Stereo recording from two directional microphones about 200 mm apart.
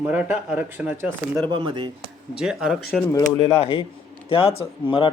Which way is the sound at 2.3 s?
5° right (ahead or behind).